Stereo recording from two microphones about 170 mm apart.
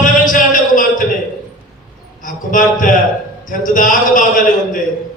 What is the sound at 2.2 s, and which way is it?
A man's voice, 50° left (ahead or behind).